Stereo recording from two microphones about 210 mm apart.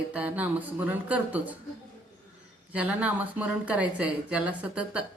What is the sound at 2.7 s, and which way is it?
Speech, 5° right (ahead or behind).